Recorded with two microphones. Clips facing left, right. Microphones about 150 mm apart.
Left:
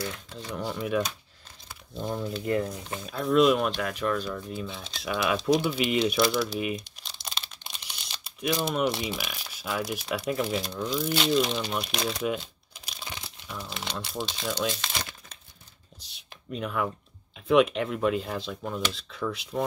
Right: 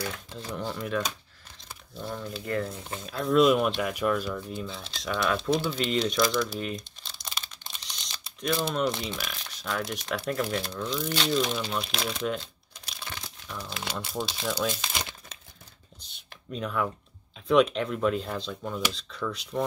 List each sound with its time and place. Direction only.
0.3 s speech: 5° right (ahead or behind)
0.6 s speech: 5° left (ahead or behind)
2.0 s speech: 20° left (ahead or behind)
3.1 s speech: centre (ahead or behind)
7.6 s crumpling: 10° left (ahead or behind)
8.6 s speech: 10° left (ahead or behind)
13.0 s crumpling: 15° left (ahead or behind)
13.7 s speech: centre (ahead or behind)
16.0 s a sound: centre (ahead or behind)
16.5 s speech: 5° left (ahead or behind)